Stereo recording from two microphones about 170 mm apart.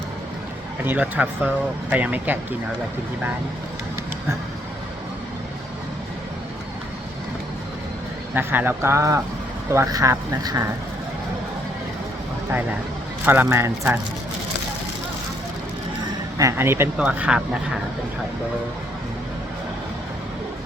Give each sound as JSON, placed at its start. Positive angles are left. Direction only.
{"t": 0.9, "sound": "speech", "side_deg": -10}
{"t": 8.4, "sound": "speech", "side_deg": -10}
{"t": 13.2, "sound": "speech", "side_deg": -10}
{"t": 16.4, "sound": "speech", "side_deg": -15}